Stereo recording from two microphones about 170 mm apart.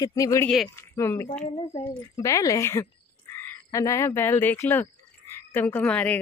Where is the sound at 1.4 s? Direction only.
40° left (ahead or behind).